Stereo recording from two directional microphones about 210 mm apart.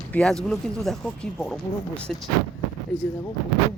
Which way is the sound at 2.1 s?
5° left (ahead or behind).